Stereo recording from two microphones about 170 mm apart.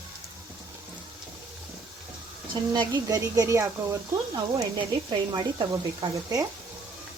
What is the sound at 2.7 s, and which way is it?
Speech, 20° right (ahead or behind).